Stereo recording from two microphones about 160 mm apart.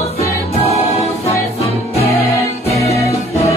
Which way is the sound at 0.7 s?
40° left (ahead or behind).